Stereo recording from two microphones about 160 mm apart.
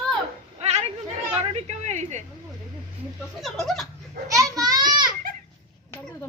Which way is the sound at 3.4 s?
Centre (ahead or behind).